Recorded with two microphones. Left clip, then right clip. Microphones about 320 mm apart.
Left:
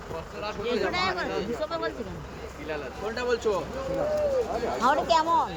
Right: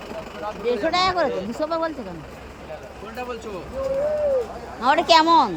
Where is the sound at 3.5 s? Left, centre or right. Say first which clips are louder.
Left 7 dB; centre.